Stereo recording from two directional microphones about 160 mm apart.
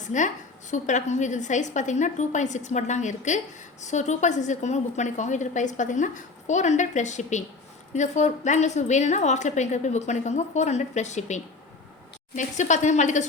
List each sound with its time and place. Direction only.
0.0 s a woman's voice: 50° left (ahead or behind)